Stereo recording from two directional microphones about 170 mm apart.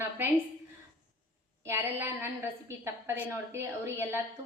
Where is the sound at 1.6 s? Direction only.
15° right (ahead or behind).